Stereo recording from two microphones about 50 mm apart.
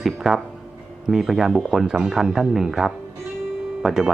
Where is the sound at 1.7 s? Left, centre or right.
Centre.